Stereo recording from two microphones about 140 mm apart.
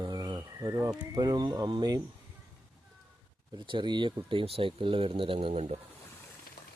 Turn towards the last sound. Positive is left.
turn(degrees=-50)  # may be behind; listen again after turning